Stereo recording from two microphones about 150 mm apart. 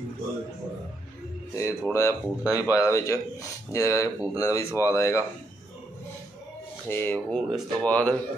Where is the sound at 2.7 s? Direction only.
20° left (ahead or behind).